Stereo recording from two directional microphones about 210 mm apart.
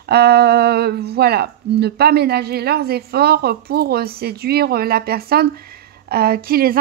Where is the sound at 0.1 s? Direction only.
50° right (ahead or behind).